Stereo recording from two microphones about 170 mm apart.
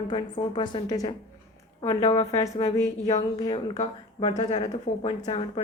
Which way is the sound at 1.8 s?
30° left (ahead or behind).